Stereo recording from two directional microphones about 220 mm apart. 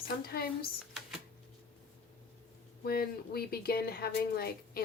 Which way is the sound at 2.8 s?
45° left (ahead or behind).